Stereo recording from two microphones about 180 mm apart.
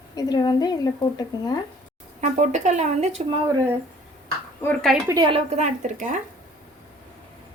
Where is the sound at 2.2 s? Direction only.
40° right (ahead or behind).